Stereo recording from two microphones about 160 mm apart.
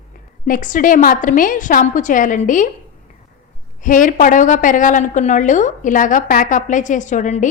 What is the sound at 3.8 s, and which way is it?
A woman's voice, 55° left (ahead or behind).